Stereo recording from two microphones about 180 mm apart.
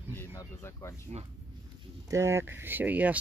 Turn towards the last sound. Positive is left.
turn(degrees=-10)  # may be behind; listen again after turning